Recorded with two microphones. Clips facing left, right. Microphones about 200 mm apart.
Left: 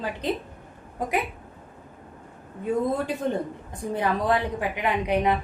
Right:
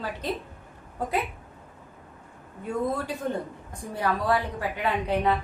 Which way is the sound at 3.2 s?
20° left (ahead or behind).